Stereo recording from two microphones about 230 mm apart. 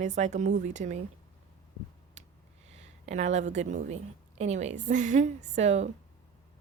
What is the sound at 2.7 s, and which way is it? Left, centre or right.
A woman's voice, right.